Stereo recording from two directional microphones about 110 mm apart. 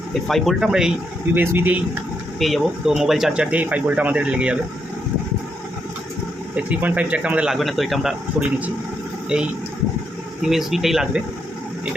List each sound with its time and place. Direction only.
0.1 s speech: 5° left (ahead or behind)
1.4 s speech: 15° right (ahead or behind)
2.4 s speech: centre (ahead or behind)
6.6 s speech: 10° right (ahead or behind)
10.4 s speech: centre (ahead or behind)